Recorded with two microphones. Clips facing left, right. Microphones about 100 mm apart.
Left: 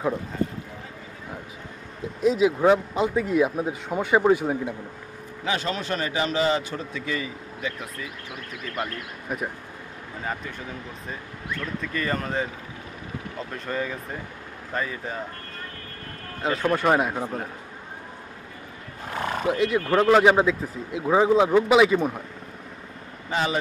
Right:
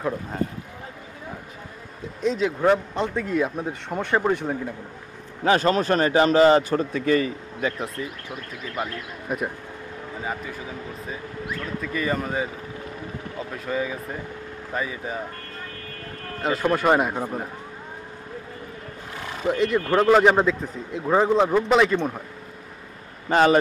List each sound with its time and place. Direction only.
2.2 s speech: 5° left (ahead or behind)
5.4 s a man's voice: 45° right (ahead or behind)
8.8 s speech: 5° right (ahead or behind)
11.8 s speech: 10° right (ahead or behind)
16.4 s speech: 5° right (ahead or behind)
19.1 s neigh: 55° left (ahead or behind)
19.5 s speech: centre (ahead or behind)
23.3 s a man's voice: 55° right (ahead or behind)